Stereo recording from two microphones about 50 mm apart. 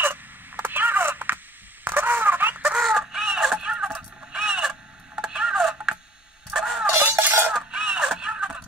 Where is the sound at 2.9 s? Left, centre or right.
Centre.